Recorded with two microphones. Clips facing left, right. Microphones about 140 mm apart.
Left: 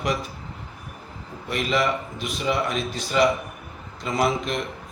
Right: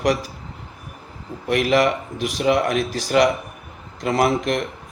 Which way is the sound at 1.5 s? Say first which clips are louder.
Right 6 dB; 65° right (ahead or behind).